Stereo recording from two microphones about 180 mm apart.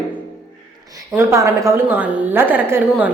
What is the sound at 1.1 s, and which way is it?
A woman's voice, 15° right (ahead or behind).